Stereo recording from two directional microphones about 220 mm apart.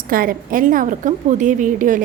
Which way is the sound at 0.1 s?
40° right (ahead or behind).